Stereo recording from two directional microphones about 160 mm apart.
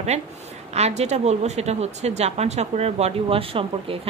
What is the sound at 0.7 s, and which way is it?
A woman's voice, 45° right (ahead or behind).